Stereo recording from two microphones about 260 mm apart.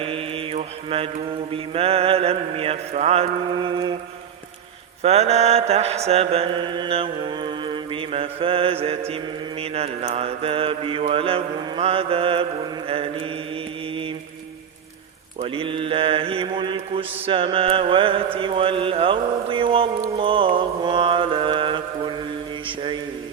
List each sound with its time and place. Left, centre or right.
0.0 s mantra: right
5.0 s mantra: right
15.4 s mantra: right